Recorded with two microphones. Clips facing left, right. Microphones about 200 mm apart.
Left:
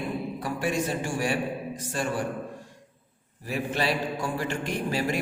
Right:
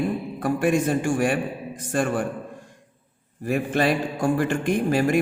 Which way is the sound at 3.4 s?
50° right (ahead or behind).